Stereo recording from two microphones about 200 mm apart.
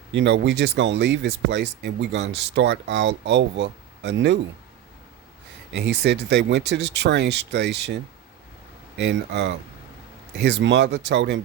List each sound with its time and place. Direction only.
0.1 s speech: 60° right (ahead or behind)
5.7 s speech: 60° right (ahead or behind)
9.0 s speech: 60° right (ahead or behind)